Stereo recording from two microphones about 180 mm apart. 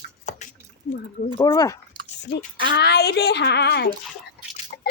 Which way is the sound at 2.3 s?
70° left (ahead or behind).